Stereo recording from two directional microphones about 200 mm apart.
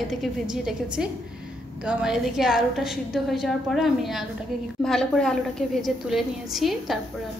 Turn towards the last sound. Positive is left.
turn(degrees=0)  # may be behind; listen again after turning